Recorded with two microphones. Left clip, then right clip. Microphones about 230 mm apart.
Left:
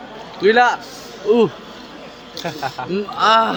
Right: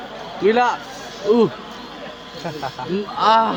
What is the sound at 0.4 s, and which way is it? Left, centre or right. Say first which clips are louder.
Speech: left 3 dB; centre.